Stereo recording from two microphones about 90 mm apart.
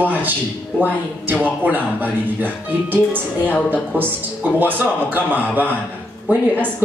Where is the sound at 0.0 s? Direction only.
20° right (ahead or behind).